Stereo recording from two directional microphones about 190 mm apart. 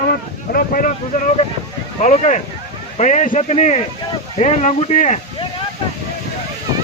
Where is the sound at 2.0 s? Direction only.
35° left (ahead or behind).